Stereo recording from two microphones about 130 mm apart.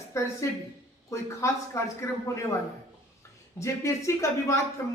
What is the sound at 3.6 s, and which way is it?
Speech, 20° left (ahead or behind).